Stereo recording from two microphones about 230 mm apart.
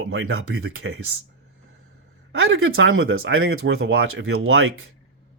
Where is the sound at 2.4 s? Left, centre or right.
Right.